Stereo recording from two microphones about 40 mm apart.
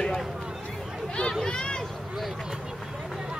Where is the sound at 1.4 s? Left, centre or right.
Left.